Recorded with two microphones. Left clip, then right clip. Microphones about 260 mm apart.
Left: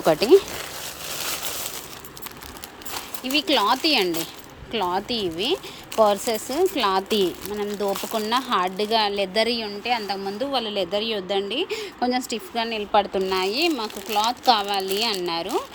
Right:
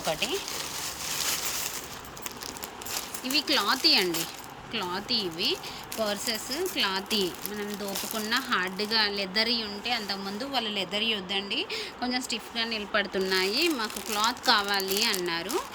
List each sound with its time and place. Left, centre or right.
0.0 s speech: left
3.2 s a woman's voice: centre